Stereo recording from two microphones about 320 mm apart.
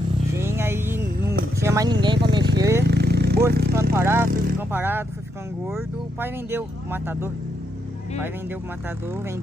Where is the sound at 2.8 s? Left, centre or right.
Right.